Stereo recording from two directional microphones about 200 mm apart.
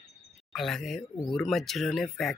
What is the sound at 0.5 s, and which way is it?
Speech, centre (ahead or behind).